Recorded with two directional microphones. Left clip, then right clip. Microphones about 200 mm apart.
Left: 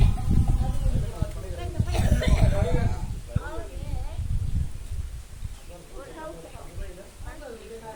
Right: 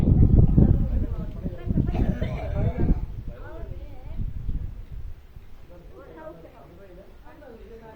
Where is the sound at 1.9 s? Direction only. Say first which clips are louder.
Left 3 dB; 30° left (ahead or behind).